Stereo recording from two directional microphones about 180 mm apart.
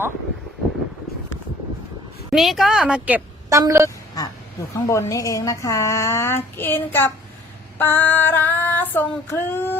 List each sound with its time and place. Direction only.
2.3 s a woman's voice: centre (ahead or behind)
3.5 s a woman's voice: 15° right (ahead or behind)
3.8 s quack: 20° left (ahead or behind)
4.7 s speech: 15° left (ahead or behind)